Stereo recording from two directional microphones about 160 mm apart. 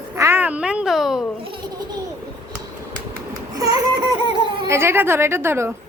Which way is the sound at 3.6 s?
25° right (ahead or behind).